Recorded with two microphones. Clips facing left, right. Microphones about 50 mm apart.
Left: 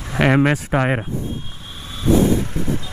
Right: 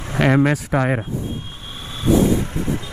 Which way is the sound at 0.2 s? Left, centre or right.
Left.